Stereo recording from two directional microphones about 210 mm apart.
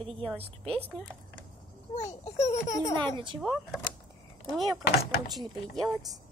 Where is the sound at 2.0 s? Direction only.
30° left (ahead or behind).